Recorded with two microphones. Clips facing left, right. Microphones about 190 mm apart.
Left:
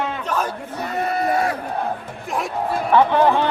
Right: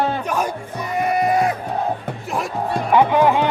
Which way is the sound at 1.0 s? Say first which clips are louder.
Right 3 dB; 15° right (ahead or behind).